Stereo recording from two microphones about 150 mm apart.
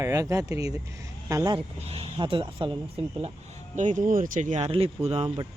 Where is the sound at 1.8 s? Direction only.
40° right (ahead or behind).